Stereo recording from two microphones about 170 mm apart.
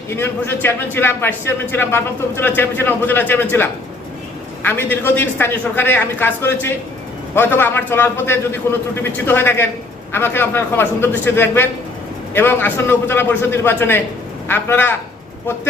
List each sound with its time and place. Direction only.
0.1 s speech: 15° left (ahead or behind)
4.6 s speech: 10° left (ahead or behind)